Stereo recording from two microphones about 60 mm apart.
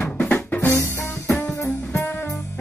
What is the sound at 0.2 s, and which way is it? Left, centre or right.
Drum kit, left.